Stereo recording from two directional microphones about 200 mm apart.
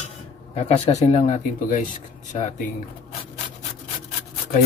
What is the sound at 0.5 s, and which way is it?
Speech, 30° left (ahead or behind).